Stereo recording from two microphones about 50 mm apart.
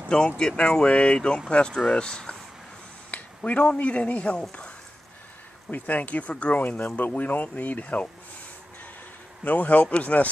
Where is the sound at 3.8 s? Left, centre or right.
Left.